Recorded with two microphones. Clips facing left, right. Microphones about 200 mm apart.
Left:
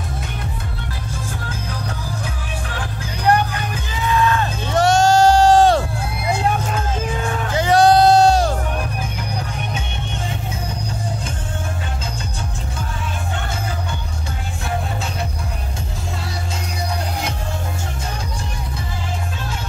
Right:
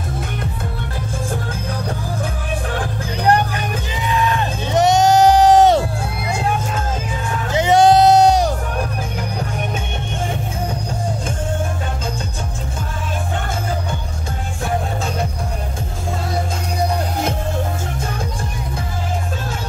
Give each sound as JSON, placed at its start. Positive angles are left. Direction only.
{"t": 4.3, "sound": "music", "side_deg": -20}
{"t": 7.5, "sound": "music", "side_deg": -20}